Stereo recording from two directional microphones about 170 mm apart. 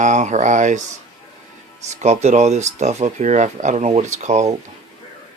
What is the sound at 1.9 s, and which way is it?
Speech, 40° right (ahead or behind).